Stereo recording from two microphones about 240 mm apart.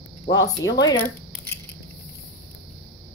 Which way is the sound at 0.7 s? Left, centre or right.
Centre.